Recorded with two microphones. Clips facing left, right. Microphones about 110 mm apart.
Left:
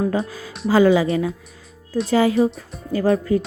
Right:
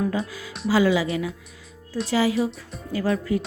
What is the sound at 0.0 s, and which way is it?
Speech, 40° left (ahead or behind).